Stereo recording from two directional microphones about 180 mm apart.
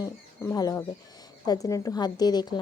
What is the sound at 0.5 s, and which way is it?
A woman's voice, 20° left (ahead or behind).